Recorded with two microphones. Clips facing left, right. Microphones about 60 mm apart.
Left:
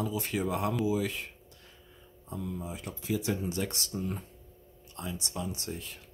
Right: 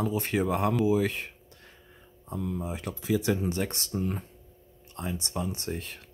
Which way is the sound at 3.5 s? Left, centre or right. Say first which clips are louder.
Right 3 dB; right.